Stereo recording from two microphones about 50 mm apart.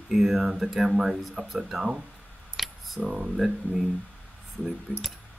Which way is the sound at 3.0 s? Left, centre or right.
Centre.